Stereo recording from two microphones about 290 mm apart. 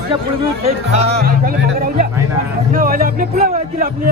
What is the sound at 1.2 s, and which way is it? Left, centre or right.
Speech, right.